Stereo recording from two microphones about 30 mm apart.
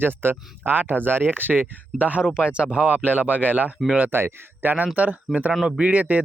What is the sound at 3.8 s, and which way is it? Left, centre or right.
Speech, left.